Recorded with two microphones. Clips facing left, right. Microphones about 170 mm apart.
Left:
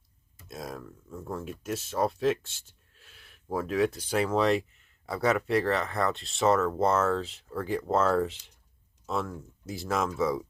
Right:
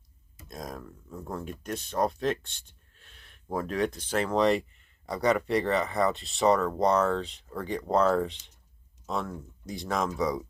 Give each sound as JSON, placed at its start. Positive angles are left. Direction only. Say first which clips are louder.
{"t": 0.4, "sound": "speech", "louder": "even", "side_deg": 5}